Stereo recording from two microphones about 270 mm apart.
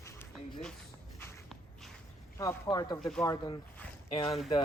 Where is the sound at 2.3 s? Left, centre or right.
Centre.